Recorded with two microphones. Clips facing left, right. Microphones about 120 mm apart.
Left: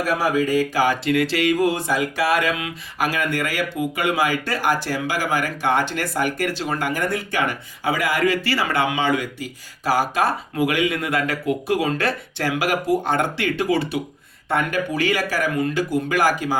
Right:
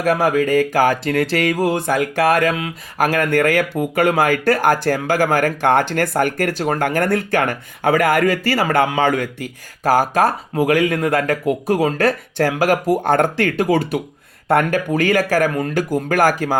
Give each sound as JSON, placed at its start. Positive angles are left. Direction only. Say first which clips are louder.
{"t": 0.0, "sound": "speech", "louder": "right 4 dB", "side_deg": -50}
{"t": 1.7, "sound": "speech", "louder": "right 4 dB", "side_deg": -55}
{"t": 14.4, "sound": "speech", "louder": "right 6 dB", "side_deg": -55}
{"t": 14.7, "sound": "speech", "louder": "right 5 dB", "side_deg": -45}